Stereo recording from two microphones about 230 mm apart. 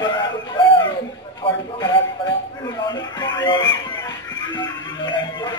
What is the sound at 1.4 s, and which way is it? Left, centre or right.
Speech, centre.